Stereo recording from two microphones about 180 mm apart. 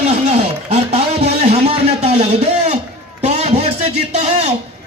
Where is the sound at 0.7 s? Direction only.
35° right (ahead or behind).